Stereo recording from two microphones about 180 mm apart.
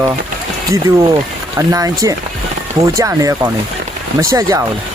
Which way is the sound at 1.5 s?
20° right (ahead or behind).